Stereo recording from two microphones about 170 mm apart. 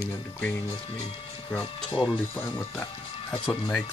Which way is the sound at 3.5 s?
10° left (ahead or behind).